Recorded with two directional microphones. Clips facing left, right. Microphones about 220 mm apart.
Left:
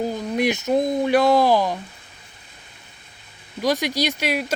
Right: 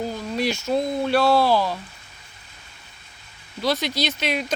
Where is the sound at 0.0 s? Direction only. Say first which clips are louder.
Left 3 dB; 15° left (ahead or behind).